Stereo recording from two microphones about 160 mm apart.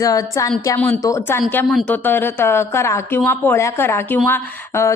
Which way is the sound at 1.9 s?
10° left (ahead or behind).